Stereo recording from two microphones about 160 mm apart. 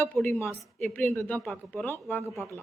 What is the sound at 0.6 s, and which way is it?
Speech, 5° left (ahead or behind).